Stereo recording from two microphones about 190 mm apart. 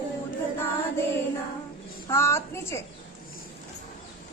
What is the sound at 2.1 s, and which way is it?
Speech, 15° left (ahead or behind).